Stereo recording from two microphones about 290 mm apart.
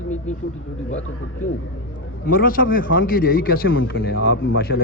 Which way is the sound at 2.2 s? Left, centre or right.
Left.